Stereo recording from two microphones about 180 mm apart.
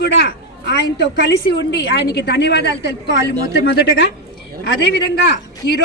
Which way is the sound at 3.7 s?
70° left (ahead or behind).